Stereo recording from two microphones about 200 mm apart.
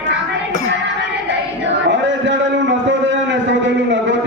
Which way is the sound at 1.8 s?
65° right (ahead or behind).